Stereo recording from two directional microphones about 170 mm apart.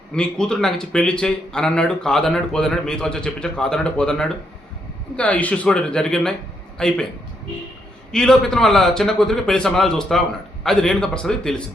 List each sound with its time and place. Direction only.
0.1 s speech: 5° left (ahead or behind)
8.1 s speech: 5° left (ahead or behind)